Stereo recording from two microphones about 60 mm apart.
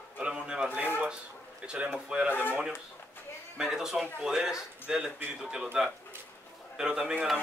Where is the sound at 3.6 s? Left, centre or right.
Centre.